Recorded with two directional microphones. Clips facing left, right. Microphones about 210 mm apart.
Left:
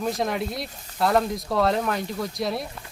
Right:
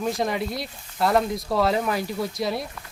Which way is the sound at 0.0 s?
Centre (ahead or behind).